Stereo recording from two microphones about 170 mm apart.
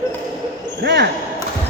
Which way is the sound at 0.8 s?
85° right.